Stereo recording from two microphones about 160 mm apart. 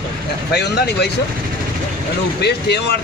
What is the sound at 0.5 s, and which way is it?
Speech, 90° left.